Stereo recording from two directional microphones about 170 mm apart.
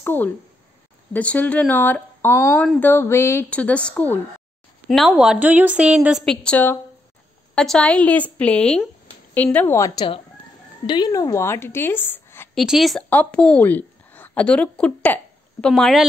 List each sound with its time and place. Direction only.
0.0 s a woman's voice: 10° left (ahead or behind)
12.5 s a woman's voice: centre (ahead or behind)